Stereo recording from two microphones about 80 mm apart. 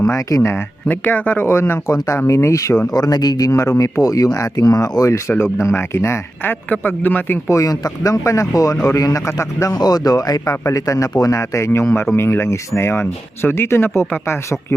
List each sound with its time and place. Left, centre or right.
0.0 s speech: left
0.9 s speech: left
2.9 s speech: left
7.5 s speech: left
9.7 s speech: left